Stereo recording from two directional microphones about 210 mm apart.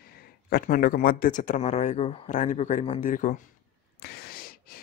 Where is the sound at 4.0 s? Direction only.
50° left (ahead or behind).